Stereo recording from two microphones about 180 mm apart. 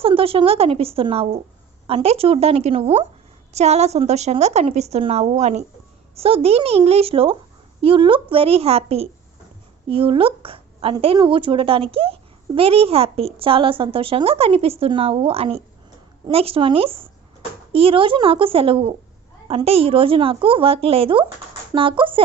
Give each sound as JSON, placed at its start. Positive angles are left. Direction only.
{"t": 0.0, "sound": "a woman's voice", "side_deg": -30}